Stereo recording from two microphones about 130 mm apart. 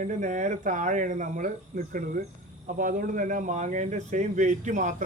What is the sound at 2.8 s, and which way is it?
Speech, 90° right.